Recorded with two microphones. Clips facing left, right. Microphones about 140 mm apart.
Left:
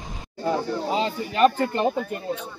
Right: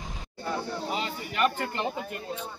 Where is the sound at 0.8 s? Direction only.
30° left (ahead or behind).